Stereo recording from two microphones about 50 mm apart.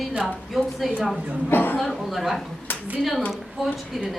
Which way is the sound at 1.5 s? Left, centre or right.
Left.